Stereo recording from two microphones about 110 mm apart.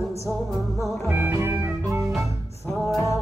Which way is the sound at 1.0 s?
20° right (ahead or behind).